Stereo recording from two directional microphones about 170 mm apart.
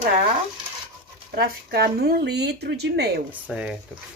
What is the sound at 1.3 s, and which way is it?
Speech, 70° right (ahead or behind).